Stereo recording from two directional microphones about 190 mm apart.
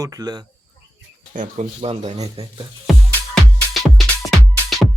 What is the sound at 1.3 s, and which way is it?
Speech, 40° right (ahead or behind).